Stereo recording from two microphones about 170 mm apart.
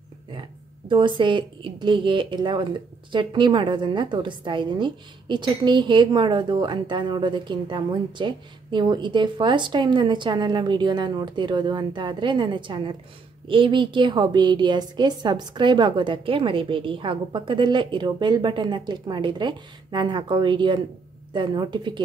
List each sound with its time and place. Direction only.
0.3 s a woman's voice: 30° right (ahead or behind)